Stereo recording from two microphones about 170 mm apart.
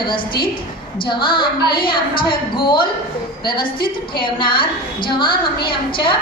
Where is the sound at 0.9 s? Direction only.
30° left (ahead or behind).